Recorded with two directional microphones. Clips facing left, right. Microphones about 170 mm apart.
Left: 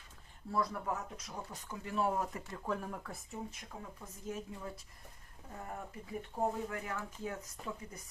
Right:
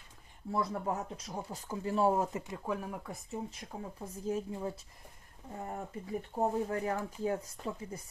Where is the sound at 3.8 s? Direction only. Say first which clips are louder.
Right 9 dB; 35° right (ahead or behind).